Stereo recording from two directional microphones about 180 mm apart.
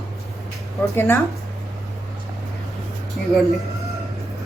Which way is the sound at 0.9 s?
10° left (ahead or behind).